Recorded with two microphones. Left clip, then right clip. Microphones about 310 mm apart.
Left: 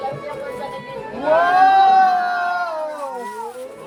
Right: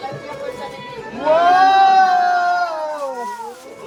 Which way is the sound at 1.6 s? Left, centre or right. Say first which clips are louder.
Left 2 dB; right.